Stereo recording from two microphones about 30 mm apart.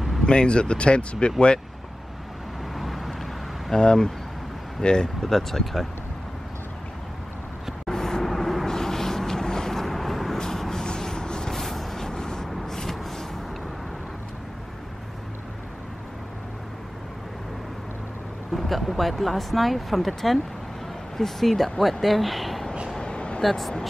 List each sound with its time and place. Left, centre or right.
0.2 s speech: left
2.7 s vehicle: centre
3.7 s speech: left
5.2 s speech: centre
7.9 s vehicle: centre
8.6 s vehicle: centre
10.3 s a sound: centre
11.6 s a sound: centre
12.1 s vehicle: left
18.5 s speech: centre
22.9 s a sound: left
23.4 s speech: centre